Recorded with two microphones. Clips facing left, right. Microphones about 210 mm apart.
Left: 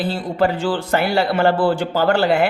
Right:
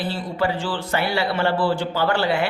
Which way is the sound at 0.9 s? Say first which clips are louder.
Left 4 dB; 45° left (ahead or behind).